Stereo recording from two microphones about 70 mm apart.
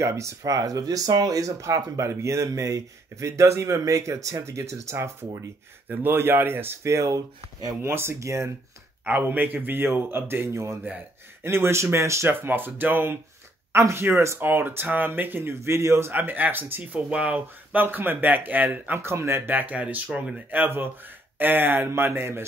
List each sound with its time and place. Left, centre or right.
0.0 s speech: right
0.4 s speech: right
7.8 s speech: right
9.0 s speech: right
12.4 s speech: right
16.1 s speech: right
18.9 s speech: right; by 20.4 s centre
20.5 s speech: right